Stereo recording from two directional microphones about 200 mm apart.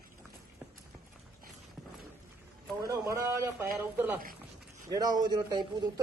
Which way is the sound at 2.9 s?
15° right (ahead or behind).